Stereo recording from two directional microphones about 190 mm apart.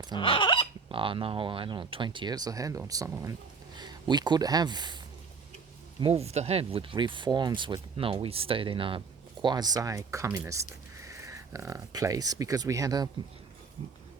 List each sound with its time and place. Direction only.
0.1 s hiccup: 25° left (ahead or behind)
0.9 s speech: 25° right (ahead or behind)
6.0 s speech: 30° right (ahead or behind)